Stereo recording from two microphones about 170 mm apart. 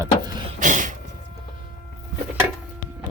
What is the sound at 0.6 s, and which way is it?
Vehicle, 50° right (ahead or behind).